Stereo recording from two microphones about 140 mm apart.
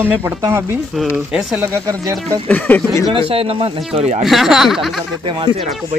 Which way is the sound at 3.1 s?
40° right (ahead or behind).